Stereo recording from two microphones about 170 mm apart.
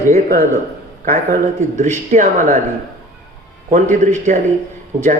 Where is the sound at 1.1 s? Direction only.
50° right (ahead or behind).